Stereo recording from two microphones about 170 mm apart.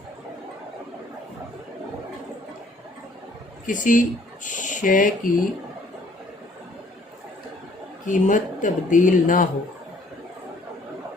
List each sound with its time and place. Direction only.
3.7 s speech: 50° left (ahead or behind)
8.0 s speech: 50° left (ahead or behind)